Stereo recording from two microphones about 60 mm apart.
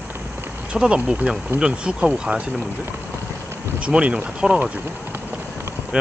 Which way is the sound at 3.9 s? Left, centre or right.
Centre.